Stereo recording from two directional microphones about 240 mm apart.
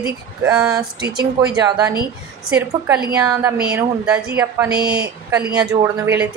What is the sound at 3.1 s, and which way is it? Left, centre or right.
A woman's voice, centre.